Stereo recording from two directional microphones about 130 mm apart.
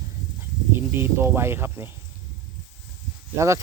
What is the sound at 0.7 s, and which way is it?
Speech, 15° right (ahead or behind).